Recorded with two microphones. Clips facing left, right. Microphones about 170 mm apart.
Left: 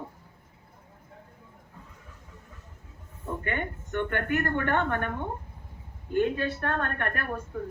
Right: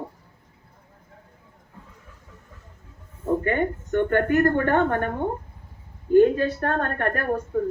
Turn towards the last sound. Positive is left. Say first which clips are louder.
# right 8 dB
turn(degrees=-40)  # may be behind; listen again after turning